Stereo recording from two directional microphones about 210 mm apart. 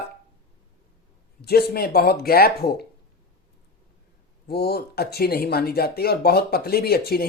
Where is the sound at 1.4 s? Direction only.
50° left (ahead or behind).